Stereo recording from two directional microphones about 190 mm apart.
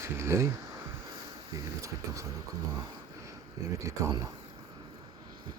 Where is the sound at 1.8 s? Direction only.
15° right (ahead or behind).